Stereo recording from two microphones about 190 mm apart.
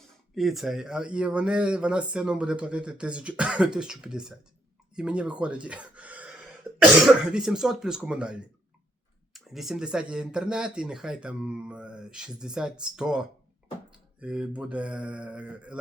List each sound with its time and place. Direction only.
0.3 s speech: centre (ahead or behind)
6.7 s cough: centre (ahead or behind)
7.0 s speech: 5° right (ahead or behind)